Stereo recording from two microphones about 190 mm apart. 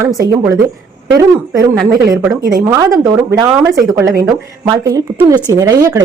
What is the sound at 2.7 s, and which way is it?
Speech, 15° right (ahead or behind).